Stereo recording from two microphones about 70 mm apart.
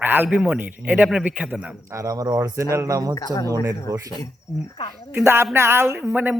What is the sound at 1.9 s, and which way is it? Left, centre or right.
Speech, right.